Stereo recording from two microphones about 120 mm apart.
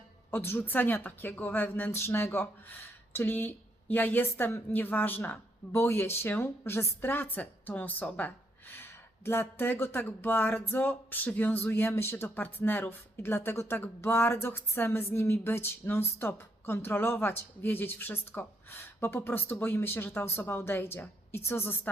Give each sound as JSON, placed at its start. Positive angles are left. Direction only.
{"t": 0.3, "sound": "a woman's voice", "side_deg": 20}